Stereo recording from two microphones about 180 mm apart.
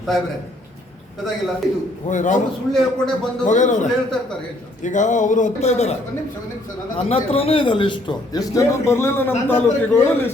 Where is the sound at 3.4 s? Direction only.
45° left (ahead or behind).